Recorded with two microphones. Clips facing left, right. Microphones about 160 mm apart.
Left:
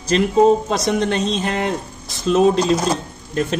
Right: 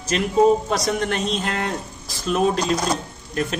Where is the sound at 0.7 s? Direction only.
20° left (ahead or behind).